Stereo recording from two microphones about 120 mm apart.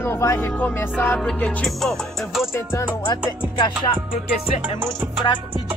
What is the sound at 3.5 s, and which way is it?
Music, 45° left (ahead or behind).